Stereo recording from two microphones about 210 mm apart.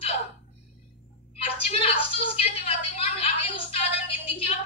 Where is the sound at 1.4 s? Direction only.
30° left (ahead or behind).